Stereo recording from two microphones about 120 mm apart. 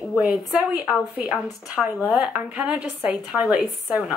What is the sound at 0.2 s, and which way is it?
A woman's voice, 5° right (ahead or behind).